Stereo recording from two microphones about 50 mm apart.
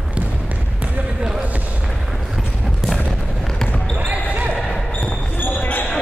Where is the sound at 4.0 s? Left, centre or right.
Right.